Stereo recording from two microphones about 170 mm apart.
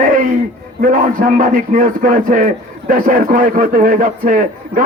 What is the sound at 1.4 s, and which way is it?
A man's voice, 50° right (ahead or behind).